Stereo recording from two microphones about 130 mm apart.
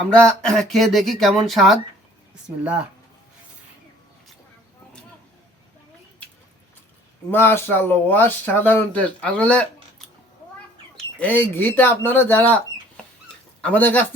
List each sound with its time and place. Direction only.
0.2 s speech: 5° left (ahead or behind)
7.3 s speech: 15° left (ahead or behind)
10.9 s speech: 10° left (ahead or behind)